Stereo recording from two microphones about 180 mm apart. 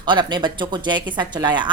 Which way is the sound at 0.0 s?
25° right (ahead or behind).